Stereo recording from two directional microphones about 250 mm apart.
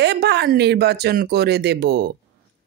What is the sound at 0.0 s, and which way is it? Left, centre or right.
Speech, right.